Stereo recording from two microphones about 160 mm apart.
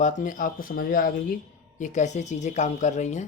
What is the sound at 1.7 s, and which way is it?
Speech, 50° left (ahead or behind).